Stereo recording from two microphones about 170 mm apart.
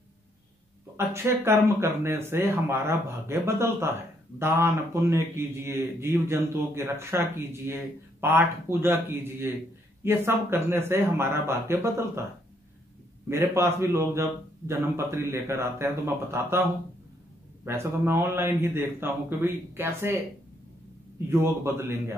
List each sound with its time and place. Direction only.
0.9 s a man's voice: 15° right (ahead or behind)
13.3 s a man's voice: 15° right (ahead or behind)
17.6 s a man's voice: 15° right (ahead or behind)
21.3 s a man's voice: 15° right (ahead or behind)